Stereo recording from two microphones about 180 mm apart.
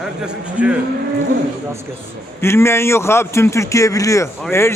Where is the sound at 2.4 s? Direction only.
15° left (ahead or behind).